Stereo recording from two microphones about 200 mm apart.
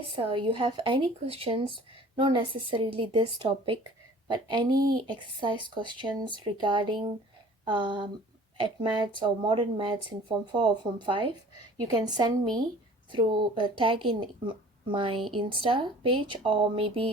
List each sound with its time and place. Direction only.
0.2 s a woman's voice: 25° right (ahead or behind)